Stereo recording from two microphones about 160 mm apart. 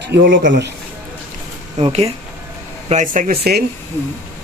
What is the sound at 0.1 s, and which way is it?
Speech, 90° right.